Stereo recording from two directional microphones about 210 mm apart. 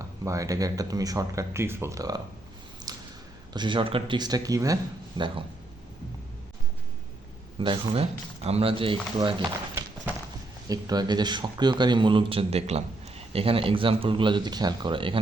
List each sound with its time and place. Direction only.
0.0 s speech: 15° right (ahead or behind)
2.9 s a sound: 20° right (ahead or behind)
3.5 s speech: 20° right (ahead or behind)
7.6 s speech: 25° right (ahead or behind)